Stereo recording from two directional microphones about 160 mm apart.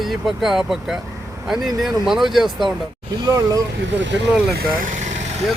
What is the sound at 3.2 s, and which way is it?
Speech, 20° right (ahead or behind).